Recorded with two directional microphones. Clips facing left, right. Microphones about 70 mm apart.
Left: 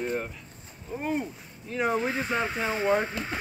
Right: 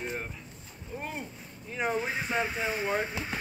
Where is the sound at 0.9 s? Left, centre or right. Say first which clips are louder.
Left 4 dB; centre.